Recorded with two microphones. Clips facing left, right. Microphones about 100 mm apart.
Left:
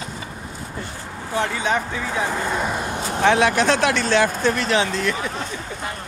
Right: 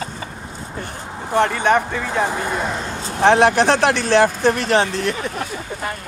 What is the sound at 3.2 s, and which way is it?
Speech, 40° right (ahead or behind).